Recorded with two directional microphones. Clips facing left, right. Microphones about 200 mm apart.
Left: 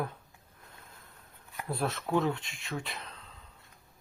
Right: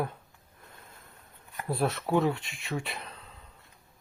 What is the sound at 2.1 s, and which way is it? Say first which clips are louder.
Speech: right 1 dB; 5° right (ahead or behind).